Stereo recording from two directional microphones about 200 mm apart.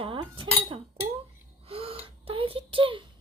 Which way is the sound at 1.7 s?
30° right (ahead or behind).